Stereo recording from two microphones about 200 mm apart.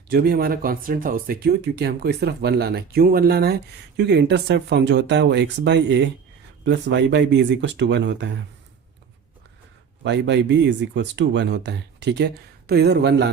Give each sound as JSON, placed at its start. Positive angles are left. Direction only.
{"t": 0.1, "sound": "speech", "side_deg": -50}
{"t": 10.0, "sound": "speech", "side_deg": -60}